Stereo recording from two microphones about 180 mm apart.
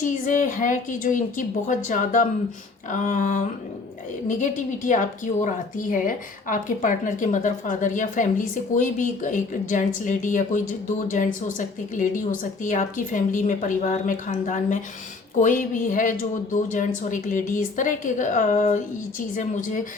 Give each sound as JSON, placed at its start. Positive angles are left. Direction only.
{"t": 0.0, "sound": "a woman's voice", "side_deg": 45}